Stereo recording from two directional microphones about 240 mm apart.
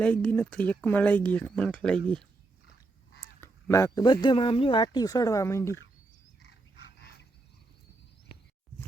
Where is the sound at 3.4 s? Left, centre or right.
Centre.